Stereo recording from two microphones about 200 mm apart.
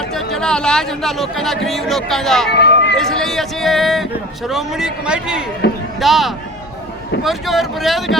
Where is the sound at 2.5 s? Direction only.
55° left (ahead or behind).